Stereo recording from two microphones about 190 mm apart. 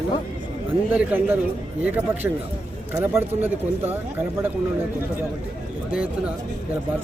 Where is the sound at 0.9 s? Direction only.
10° right (ahead or behind).